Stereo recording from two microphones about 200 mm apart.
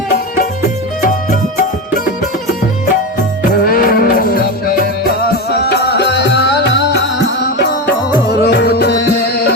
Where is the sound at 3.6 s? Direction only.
45° left (ahead or behind).